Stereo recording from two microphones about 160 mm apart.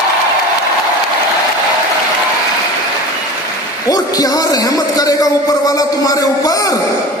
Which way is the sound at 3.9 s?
25° left (ahead or behind).